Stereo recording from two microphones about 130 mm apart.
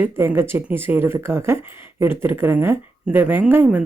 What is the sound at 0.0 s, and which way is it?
Speech, 15° right (ahead or behind).